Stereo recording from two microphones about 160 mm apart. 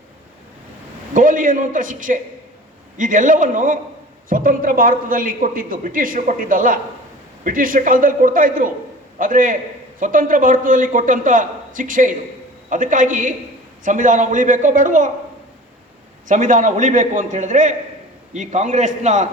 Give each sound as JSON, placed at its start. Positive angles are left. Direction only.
{"t": 1.1, "sound": "a man's voice", "side_deg": -55}
{"t": 16.3, "sound": "a man's voice", "side_deg": -50}